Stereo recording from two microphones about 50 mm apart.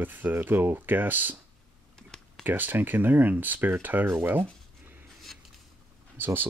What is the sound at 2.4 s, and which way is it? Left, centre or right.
Speech, right.